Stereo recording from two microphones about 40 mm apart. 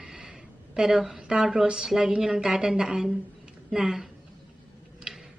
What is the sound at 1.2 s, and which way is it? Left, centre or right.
Speech, right.